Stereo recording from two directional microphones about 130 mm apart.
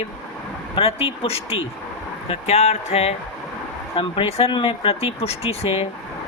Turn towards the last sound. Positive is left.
turn(degrees=50)  # may be behind; listen again after turning